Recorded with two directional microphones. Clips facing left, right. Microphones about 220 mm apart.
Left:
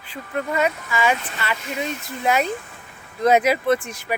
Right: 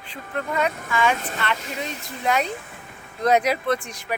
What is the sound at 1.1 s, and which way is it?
Speech, 45° right (ahead or behind).